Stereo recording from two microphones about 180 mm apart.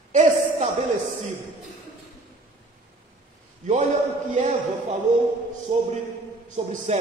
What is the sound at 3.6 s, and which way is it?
Speech, 45° right (ahead or behind).